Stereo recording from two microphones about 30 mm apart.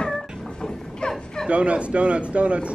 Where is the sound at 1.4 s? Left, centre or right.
Right.